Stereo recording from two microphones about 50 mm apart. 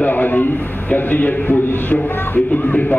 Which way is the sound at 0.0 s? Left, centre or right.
Left.